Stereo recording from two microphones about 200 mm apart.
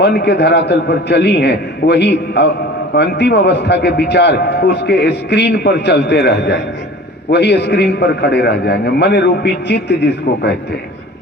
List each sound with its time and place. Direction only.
0.0 s a man's voice: 55° left (ahead or behind)